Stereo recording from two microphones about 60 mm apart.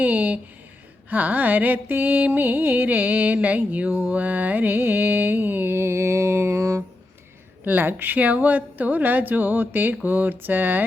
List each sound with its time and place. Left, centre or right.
0.0 s music: right
4.1 s mantra: right
7.6 s a woman's voice: right